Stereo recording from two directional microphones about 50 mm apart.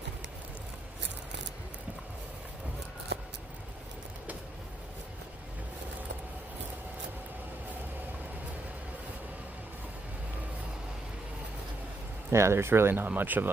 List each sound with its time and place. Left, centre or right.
12.3 s speech: right
13.1 s speech: right